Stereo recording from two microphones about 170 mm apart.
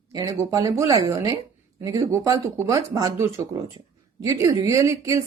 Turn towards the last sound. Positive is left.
turn(degrees=-20)  # may be behind; listen again after turning